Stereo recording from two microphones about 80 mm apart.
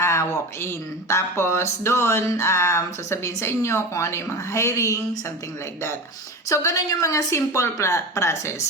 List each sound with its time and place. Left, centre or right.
0.0 s speech: left
6.5 s speech: left